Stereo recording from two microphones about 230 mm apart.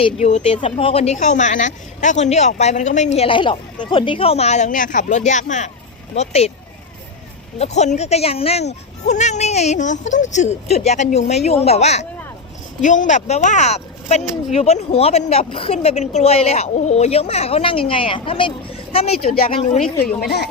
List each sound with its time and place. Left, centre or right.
0.0 s speech: left
7.6 s speech: left
20.2 s a woman's voice: left